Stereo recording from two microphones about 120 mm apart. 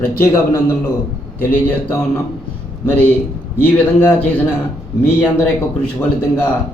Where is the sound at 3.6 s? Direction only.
20° left (ahead or behind).